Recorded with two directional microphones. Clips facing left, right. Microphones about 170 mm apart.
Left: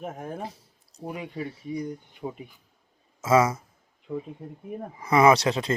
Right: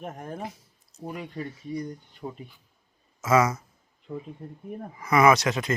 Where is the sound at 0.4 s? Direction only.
30° left (ahead or behind).